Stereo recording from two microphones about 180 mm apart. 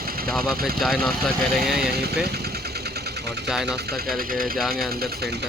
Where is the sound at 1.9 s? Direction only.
60° right (ahead or behind).